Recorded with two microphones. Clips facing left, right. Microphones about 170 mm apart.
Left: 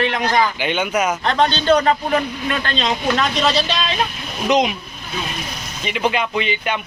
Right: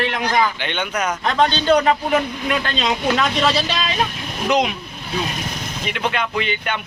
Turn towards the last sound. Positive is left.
turn(degrees=0)  # may be behind; listen again after turning